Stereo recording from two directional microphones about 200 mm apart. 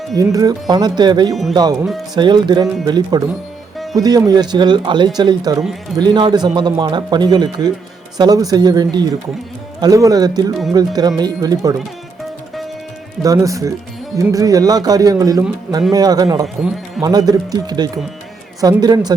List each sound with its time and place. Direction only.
0.1 s speech: 20° right (ahead or behind)
13.2 s music: 15° right (ahead or behind)
15.9 s speech: 20° right (ahead or behind)